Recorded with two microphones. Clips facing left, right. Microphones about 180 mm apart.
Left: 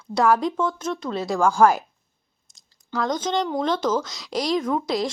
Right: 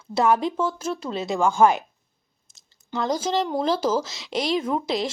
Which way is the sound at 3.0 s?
5° right (ahead or behind).